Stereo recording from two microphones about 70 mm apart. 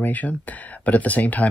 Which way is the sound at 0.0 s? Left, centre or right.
Left.